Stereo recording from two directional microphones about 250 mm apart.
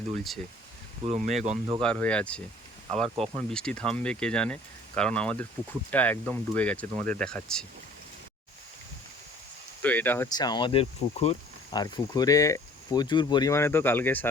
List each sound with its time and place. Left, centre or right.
1.0 s speech: right
1.5 s speech: centre
1.8 s speech: centre
9.8 s speech: centre